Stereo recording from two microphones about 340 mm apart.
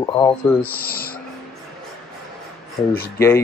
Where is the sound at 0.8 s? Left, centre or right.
Left.